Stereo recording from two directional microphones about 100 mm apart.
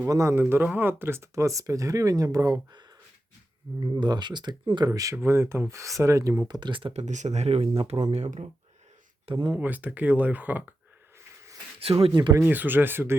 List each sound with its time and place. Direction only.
0.1 s speech: 30° right (ahead or behind)
3.9 s speech: 45° right (ahead or behind)
4.9 s speech: 35° right (ahead or behind)
6.5 s speech: 50° right (ahead or behind)
6.9 s speech: 90° right
9.2 s speech: 55° right (ahead or behind)
9.6 s speech: 15° right (ahead or behind)
11.8 s speech: 70° right (ahead or behind)
12.3 s speech: 20° right (ahead or behind)